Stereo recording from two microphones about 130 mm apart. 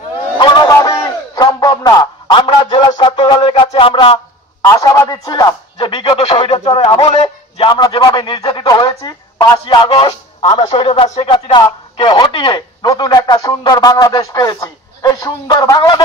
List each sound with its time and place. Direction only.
0.4 s a sound: 35° left (ahead or behind)
4.6 s speech: 30° left (ahead or behind)
5.8 s speech: 40° left (ahead or behind)
10.5 s speech: 55° left (ahead or behind); by 16.0 s 25° left (ahead or behind)